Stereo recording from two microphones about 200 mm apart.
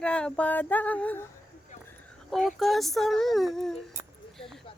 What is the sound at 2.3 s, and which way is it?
Speech, centre (ahead or behind).